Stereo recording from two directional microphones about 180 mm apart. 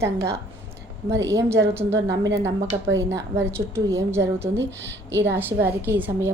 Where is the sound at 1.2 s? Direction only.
15° right (ahead or behind).